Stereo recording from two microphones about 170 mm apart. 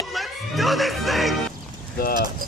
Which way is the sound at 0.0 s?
Centre (ahead or behind).